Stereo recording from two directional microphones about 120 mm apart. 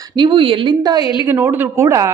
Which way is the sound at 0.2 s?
45° right (ahead or behind).